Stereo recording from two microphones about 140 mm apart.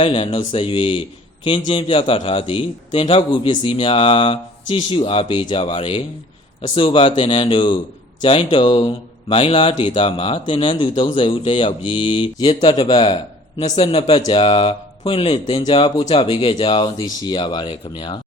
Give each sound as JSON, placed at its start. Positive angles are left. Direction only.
{"t": 0.0, "sound": "a man's voice", "side_deg": 40}